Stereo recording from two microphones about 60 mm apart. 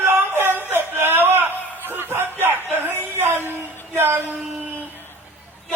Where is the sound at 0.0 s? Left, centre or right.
Right.